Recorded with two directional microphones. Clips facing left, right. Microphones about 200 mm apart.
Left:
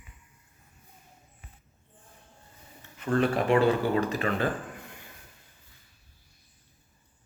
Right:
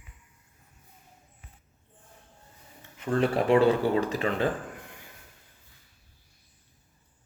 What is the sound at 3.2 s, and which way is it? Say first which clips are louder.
Speech: right 2 dB; 30° right (ahead or behind).